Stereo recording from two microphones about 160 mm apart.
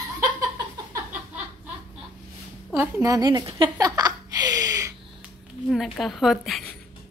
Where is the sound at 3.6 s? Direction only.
25° right (ahead or behind).